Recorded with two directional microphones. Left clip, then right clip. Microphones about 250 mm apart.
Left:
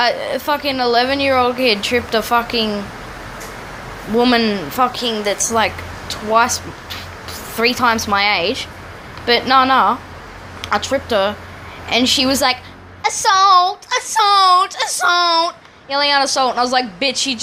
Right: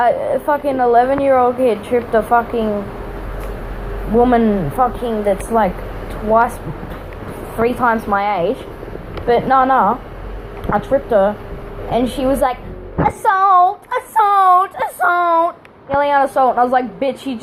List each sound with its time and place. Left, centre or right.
0.0 s speech: left
4.2 s speech: left
7.6 s speech: left